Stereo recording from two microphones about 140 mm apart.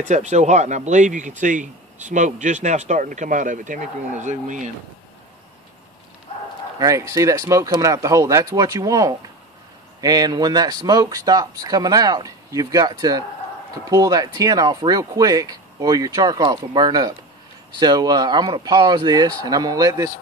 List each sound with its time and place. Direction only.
0.1 s speech: 55° right (ahead or behind)
6.3 s a sound: 45° left (ahead or behind)
6.8 s a man's voice: 20° right (ahead or behind)